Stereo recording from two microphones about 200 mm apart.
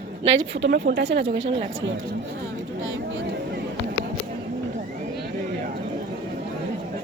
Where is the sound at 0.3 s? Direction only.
60° right (ahead or behind).